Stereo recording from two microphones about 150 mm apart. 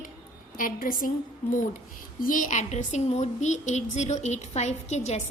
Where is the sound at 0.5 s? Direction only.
65° left (ahead or behind).